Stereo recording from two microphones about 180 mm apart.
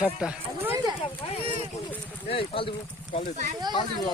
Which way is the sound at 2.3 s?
30° left (ahead or behind).